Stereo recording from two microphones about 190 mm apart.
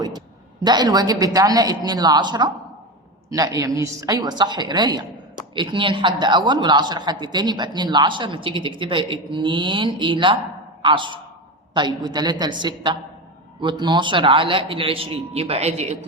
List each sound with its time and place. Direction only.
0.6 s a man's voice: 20° right (ahead or behind)